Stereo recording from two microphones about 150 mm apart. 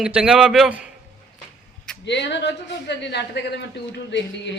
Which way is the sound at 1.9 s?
5° left (ahead or behind).